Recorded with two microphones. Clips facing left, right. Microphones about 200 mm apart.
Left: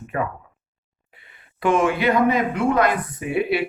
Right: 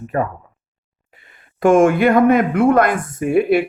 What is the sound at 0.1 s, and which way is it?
Speech, 35° right (ahead or behind).